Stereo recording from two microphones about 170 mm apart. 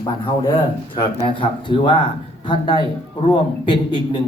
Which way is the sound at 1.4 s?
30° left (ahead or behind).